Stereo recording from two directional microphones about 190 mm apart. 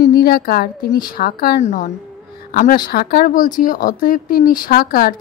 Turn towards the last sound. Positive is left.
turn(degrees=50)  # may be behind; listen again after turning